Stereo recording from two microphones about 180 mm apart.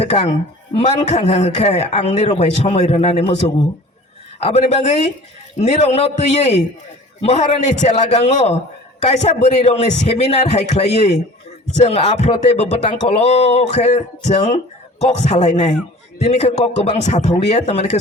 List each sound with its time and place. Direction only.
0.0 s speech: 35° left (ahead or behind)
4.4 s speech: 35° left (ahead or behind)
7.9 s speech: 40° left (ahead or behind)